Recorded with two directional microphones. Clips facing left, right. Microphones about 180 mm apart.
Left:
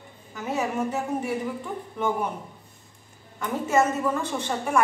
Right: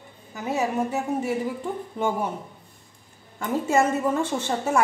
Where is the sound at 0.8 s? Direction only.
20° right (ahead or behind).